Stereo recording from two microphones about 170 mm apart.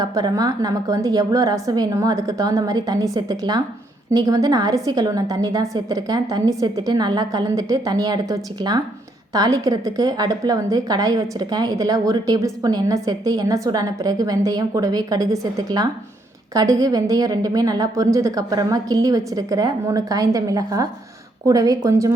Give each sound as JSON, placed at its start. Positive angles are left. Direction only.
{"t": 0.0, "sound": "a woman's voice", "side_deg": -25}